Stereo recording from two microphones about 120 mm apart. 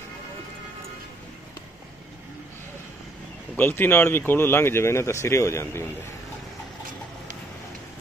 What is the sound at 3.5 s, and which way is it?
Speech, 15° left (ahead or behind).